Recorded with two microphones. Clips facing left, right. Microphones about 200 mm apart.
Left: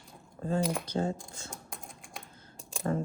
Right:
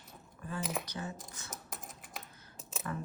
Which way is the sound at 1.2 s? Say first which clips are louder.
Left 3 dB; 20° right (ahead or behind).